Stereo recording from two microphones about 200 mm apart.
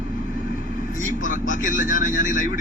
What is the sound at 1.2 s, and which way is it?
A man's voice, 40° left (ahead or behind).